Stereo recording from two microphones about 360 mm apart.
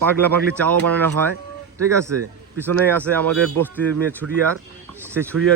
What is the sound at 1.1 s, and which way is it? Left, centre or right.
Speech, right.